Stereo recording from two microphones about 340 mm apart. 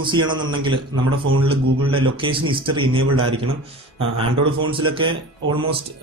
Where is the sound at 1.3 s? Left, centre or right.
Right.